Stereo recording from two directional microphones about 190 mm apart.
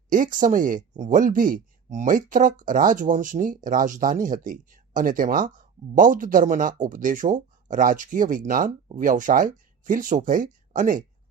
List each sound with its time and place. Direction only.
0.1 s speech: 45° right (ahead or behind)